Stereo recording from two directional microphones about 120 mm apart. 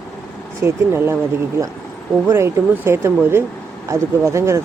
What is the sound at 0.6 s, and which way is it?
Speech, 20° right (ahead or behind).